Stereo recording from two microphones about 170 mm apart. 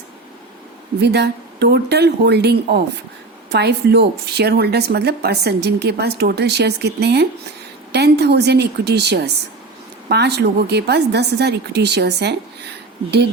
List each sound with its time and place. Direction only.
1.0 s a woman's voice: 75° right (ahead or behind)